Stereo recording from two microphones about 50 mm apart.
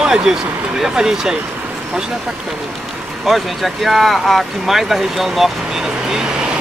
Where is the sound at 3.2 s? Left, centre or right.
Centre.